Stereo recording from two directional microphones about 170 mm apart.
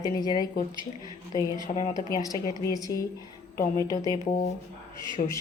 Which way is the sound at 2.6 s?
20° left (ahead or behind).